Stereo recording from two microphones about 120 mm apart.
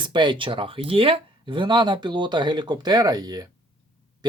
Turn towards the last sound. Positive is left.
turn(degrees=-35)  # may be behind; listen again after turning